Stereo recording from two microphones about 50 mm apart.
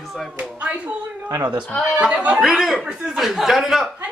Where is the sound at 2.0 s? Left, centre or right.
Right.